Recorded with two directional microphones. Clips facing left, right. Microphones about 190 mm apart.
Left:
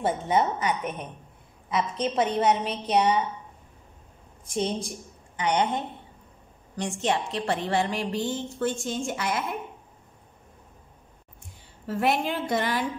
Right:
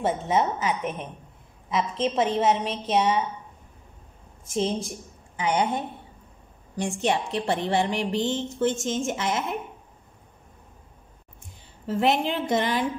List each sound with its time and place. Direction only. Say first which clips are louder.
0.0 s a woman's voice: even; centre (ahead or behind)
4.5 s a woman's voice: right 2 dB; centre (ahead or behind); by 9.6 s 20° right (ahead or behind)
11.8 s a woman's voice: right 2 dB; 20° right (ahead or behind)